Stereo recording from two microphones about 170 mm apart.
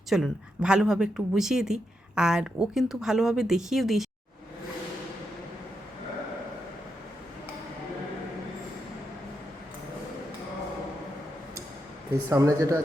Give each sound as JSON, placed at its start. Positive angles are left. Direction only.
{"t": 0.1, "sound": "a woman's voice", "side_deg": -5}
{"t": 12.3, "sound": "speech", "side_deg": -20}